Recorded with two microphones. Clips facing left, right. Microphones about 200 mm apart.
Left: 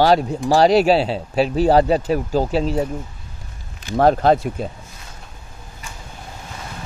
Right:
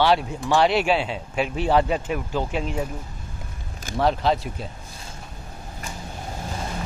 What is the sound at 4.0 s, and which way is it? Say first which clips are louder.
Speech: left 7 dB; 50° left (ahead or behind).